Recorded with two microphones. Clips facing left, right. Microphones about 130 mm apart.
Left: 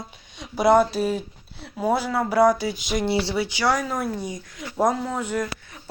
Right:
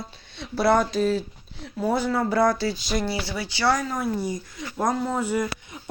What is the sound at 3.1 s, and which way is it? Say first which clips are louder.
Speech: left 6 dB; 25° left (ahead or behind).